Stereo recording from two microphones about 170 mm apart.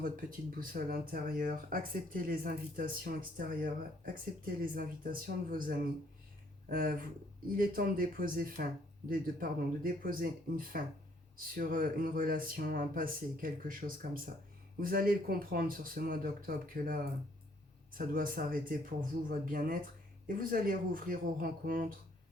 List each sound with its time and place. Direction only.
0.0 s speech: 55° right (ahead or behind)